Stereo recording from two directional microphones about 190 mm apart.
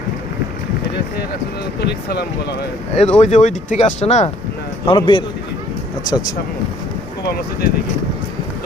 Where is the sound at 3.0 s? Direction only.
35° left (ahead or behind); by 6.3 s 20° left (ahead or behind).